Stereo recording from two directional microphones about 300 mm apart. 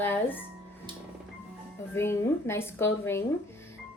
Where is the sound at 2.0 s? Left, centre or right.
Centre.